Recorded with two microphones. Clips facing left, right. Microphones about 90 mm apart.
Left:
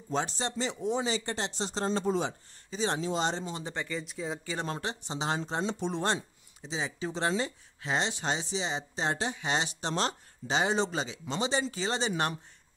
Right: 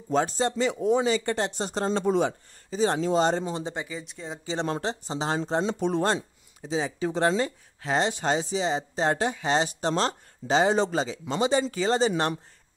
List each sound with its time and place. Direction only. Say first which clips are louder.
0.1 s speech: right 7 dB; 45° right (ahead or behind)
2.7 s speech: right 7 dB; 45° right (ahead or behind)
3.7 s speech: right 1 dB; 10° right (ahead or behind)
4.0 s speech: left 2 dB; centre (ahead or behind)
4.8 s speech: right 4 dB; 40° right (ahead or behind)
5.7 s speech: right 4 dB; 50° right (ahead or behind)
9.5 s speech: right 7 dB; 40° right (ahead or behind)